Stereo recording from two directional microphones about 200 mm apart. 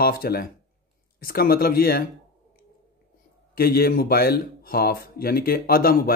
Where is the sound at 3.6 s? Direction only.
50° left (ahead or behind).